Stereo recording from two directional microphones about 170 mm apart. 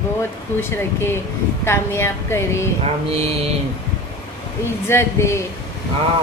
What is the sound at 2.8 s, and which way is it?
Mantra, 35° right (ahead or behind).